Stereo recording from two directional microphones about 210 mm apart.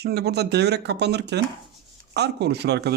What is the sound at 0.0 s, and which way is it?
Speech, 50° right (ahead or behind).